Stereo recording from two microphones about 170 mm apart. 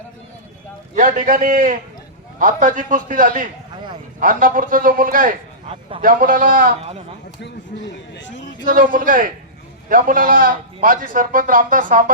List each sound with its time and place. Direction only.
0.9 s a man's voice: 55° right (ahead or behind)
7.4 s a sound: 90° left
8.6 s a man's voice: 55° right (ahead or behind)